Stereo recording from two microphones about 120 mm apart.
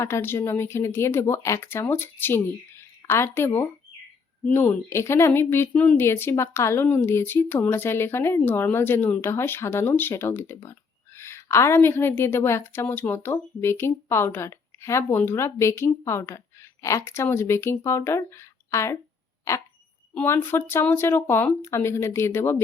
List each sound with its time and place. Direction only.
0.0 s speech: 20° left (ahead or behind)
20.2 s speech: 20° left (ahead or behind)